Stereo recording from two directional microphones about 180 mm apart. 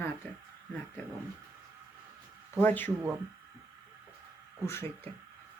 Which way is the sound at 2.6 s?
10° left (ahead or behind).